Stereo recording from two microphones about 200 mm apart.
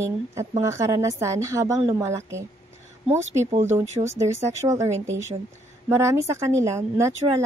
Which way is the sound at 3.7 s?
15° right (ahead or behind).